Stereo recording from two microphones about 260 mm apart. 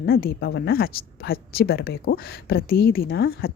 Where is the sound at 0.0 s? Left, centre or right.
Left.